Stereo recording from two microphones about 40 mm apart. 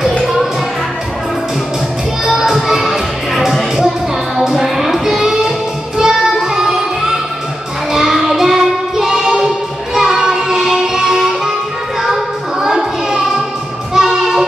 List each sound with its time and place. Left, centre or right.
2.2 s music: centre
7.9 s child singing: centre
9.9 s music: centre
12.6 s music: centre